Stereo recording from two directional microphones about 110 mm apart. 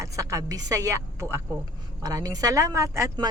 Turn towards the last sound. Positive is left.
turn(degrees=-30)  # may be behind; listen again after turning